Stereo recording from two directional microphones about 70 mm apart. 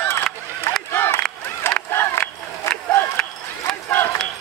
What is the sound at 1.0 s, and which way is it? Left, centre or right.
Crowd, left.